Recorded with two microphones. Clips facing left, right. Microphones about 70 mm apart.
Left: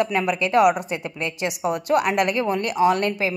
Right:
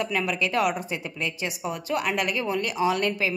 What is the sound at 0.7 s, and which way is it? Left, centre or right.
A woman's voice, left.